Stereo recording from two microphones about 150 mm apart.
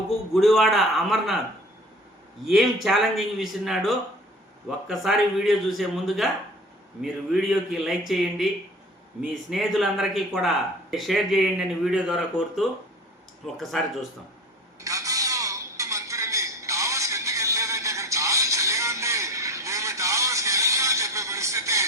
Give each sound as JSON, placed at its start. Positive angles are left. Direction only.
{"t": 0.3, "sound": "speech", "side_deg": 0}
{"t": 2.4, "sound": "speech", "side_deg": 0}
{"t": 14.8, "sound": "telephone", "side_deg": -20}